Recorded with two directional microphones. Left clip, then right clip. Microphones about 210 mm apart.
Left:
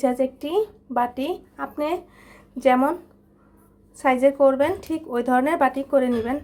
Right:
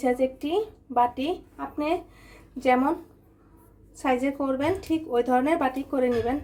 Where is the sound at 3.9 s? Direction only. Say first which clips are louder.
Left 7 dB; 30° left (ahead or behind).